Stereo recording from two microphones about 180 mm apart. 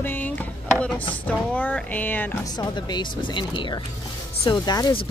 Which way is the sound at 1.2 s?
10° left (ahead or behind).